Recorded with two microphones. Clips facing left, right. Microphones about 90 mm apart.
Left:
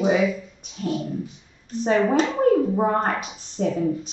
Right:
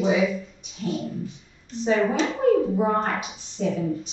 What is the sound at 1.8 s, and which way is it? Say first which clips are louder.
A woman's voice: left 2 dB; 45° left (ahead or behind).